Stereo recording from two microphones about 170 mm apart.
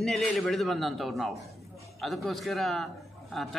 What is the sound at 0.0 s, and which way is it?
A man's voice, centre (ahead or behind).